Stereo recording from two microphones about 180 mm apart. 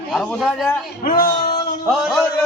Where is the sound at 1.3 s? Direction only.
20° left (ahead or behind).